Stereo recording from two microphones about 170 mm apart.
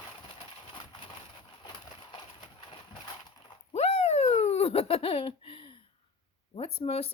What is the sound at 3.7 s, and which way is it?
Baby laughter, 40° left (ahead or behind).